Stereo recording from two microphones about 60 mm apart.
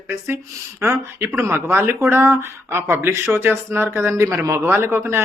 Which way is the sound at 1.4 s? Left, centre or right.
Right.